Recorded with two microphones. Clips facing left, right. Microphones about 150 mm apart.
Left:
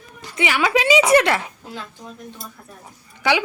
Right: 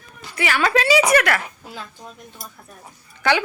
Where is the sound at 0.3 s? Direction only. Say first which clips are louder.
Even; 15° left (ahead or behind).